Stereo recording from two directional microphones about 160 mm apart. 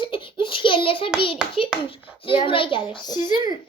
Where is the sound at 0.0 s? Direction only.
30° left (ahead or behind).